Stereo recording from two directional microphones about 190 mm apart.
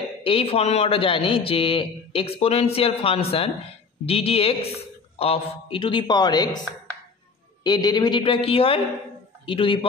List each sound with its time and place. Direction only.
0.2 s a man's voice: 30° left (ahead or behind)
7.6 s speech: 20° left (ahead or behind)